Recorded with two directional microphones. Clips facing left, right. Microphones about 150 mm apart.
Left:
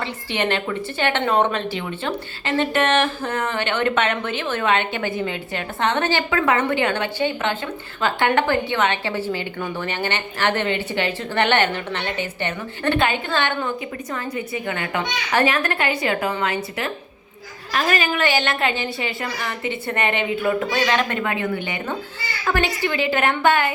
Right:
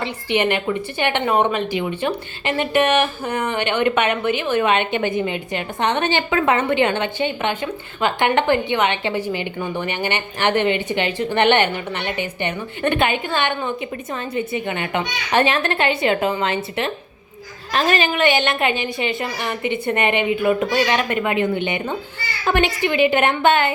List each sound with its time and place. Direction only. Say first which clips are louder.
0.0 s a woman's voice: right 4 dB; 15° right (ahead or behind)